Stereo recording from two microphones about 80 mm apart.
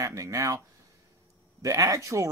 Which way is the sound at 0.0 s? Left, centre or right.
Right.